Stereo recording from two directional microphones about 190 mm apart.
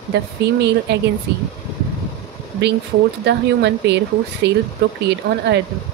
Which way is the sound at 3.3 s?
65° right (ahead or behind).